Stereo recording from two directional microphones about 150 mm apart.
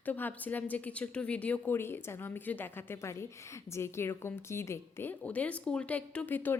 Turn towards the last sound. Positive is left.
turn(degrees=10)  # may be behind; listen again after turning